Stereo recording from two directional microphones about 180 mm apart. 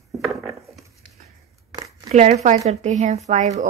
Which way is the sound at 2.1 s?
40° right (ahead or behind).